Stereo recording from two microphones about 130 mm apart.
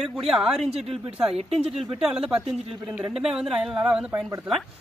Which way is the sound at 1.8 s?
5° right (ahead or behind).